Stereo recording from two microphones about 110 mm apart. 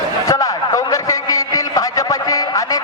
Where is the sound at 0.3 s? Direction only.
35° left (ahead or behind).